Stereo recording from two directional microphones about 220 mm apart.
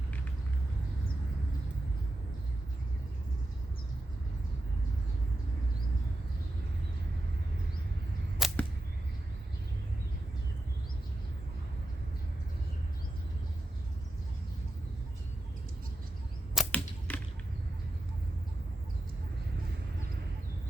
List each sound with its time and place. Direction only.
8.4 s arrow: centre (ahead or behind)
16.6 s arrow: 5° left (ahead or behind)